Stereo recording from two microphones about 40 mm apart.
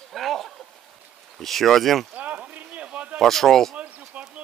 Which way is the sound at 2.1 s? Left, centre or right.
Right.